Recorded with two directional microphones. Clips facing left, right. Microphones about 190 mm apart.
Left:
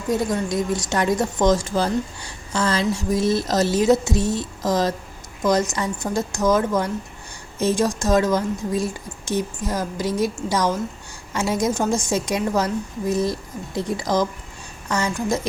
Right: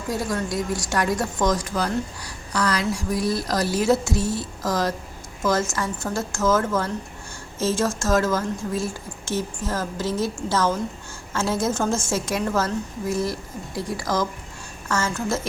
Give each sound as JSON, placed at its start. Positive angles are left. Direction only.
{"t": 0.1, "sound": "a woman's voice", "side_deg": 20}